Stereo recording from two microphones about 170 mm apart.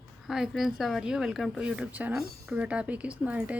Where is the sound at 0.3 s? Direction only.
5° right (ahead or behind).